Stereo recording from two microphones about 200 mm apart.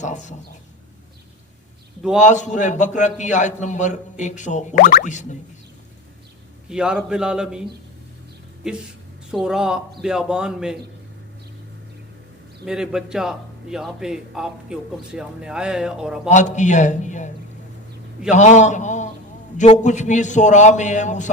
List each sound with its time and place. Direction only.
0.0 s speech: 40° left (ahead or behind)
2.0 s a man's voice: 5° right (ahead or behind)
2.2 s a man's voice: 35° left (ahead or behind)
6.7 s a man's voice: 5° right (ahead or behind)
9.3 s a man's voice: 5° right (ahead or behind)
12.6 s a man's voice: 5° right (ahead or behind)
16.3 s a man's voice: 35° left (ahead or behind)